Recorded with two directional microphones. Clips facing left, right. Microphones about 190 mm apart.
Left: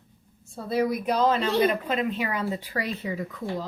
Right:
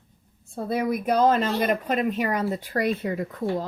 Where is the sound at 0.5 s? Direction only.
55° right (ahead or behind).